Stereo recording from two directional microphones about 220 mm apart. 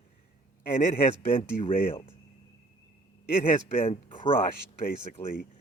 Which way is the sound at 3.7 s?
30° left (ahead or behind).